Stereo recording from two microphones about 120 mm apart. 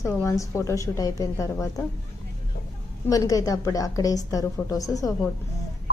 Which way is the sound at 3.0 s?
30° left (ahead or behind).